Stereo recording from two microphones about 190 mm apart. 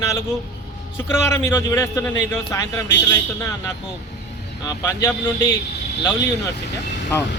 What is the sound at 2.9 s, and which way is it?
Speech, 70° left (ahead or behind).